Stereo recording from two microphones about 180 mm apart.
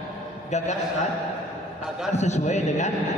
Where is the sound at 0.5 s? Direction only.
40° left (ahead or behind).